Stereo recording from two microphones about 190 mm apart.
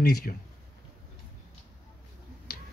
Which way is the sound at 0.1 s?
50° left (ahead or behind).